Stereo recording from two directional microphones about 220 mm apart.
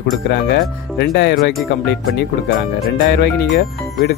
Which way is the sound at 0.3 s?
50° left (ahead or behind).